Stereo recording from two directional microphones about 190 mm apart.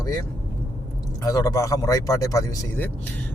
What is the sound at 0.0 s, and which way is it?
Speech, 20° left (ahead or behind).